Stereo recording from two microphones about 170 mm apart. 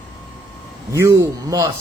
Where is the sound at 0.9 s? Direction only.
15° right (ahead or behind).